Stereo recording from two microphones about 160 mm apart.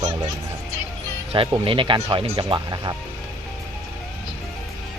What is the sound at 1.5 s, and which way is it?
Speech, 30° right (ahead or behind).